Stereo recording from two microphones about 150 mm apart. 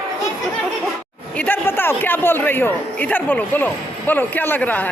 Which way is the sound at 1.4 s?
15° left (ahead or behind).